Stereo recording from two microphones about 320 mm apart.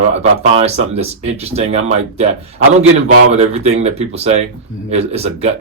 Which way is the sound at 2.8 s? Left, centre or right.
Right.